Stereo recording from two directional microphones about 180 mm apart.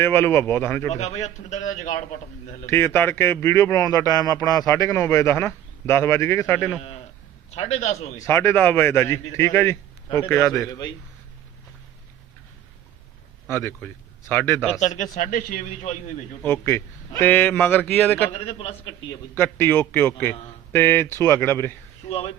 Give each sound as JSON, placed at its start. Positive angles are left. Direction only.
{"t": 0.0, "sound": "speech", "side_deg": 15}
{"t": 0.9, "sound": "a man's voice", "side_deg": 40}
{"t": 2.6, "sound": "speech", "side_deg": 15}
{"t": 7.5, "sound": "a man's voice", "side_deg": 35}
{"t": 8.2, "sound": "speech", "side_deg": 15}
{"t": 13.5, "sound": "speech", "side_deg": 15}
{"t": 14.8, "sound": "a man's voice", "side_deg": 40}
{"t": 16.4, "sound": "speech", "side_deg": 10}
{"t": 18.3, "sound": "a man's voice", "side_deg": 35}
{"t": 19.4, "sound": "speech", "side_deg": 10}